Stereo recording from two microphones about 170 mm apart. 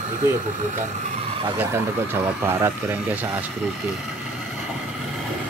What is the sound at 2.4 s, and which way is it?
Speech, 15° right (ahead or behind).